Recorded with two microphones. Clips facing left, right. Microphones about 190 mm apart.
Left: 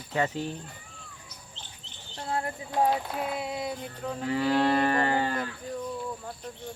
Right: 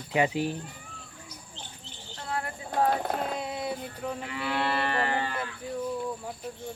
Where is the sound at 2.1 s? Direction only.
30° left (ahead or behind).